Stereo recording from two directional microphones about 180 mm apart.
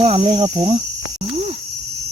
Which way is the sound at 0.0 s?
35° right (ahead or behind).